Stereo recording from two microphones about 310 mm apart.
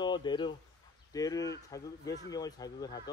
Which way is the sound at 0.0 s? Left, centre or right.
Centre.